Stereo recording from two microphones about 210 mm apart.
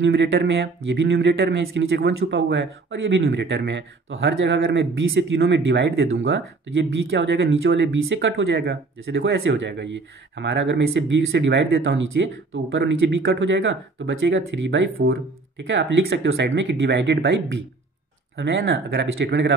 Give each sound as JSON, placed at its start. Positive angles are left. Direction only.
{"t": 0.0, "sound": "speech", "side_deg": -55}